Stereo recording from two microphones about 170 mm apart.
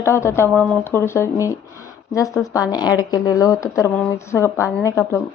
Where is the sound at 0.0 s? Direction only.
15° left (ahead or behind).